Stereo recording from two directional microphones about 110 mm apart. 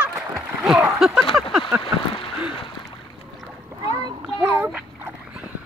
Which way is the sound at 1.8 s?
55° left (ahead or behind).